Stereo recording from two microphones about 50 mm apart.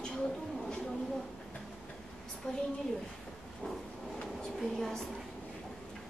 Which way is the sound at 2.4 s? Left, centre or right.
Left.